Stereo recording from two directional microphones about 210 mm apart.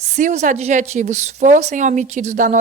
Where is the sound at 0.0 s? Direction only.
35° right (ahead or behind).